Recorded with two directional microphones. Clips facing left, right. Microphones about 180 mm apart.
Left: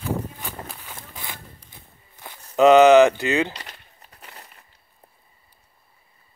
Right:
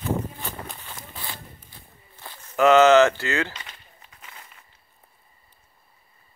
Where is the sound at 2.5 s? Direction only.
20° left (ahead or behind).